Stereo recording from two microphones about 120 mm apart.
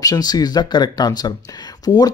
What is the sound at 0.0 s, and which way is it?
Speech, 35° left (ahead or behind).